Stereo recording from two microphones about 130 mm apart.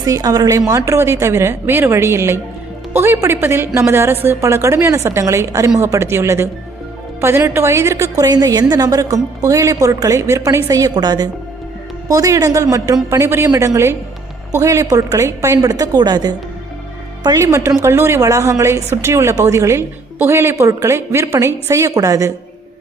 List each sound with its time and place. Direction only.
0.0 s a woman's voice: 30° right (ahead or behind)